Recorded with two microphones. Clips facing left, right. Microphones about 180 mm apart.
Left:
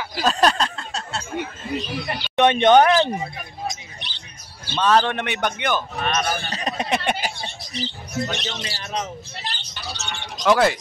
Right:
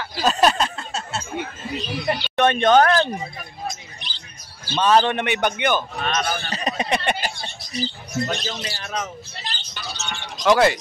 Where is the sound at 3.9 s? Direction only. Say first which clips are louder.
Left 1 dB; 65° left (ahead or behind).